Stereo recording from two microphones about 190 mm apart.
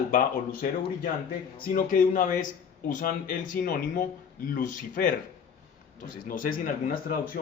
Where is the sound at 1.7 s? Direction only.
45° left (ahead or behind).